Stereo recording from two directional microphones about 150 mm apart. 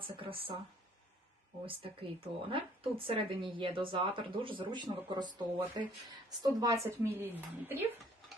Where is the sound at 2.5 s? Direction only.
35° right (ahead or behind); by 7.3 s 15° right (ahead or behind).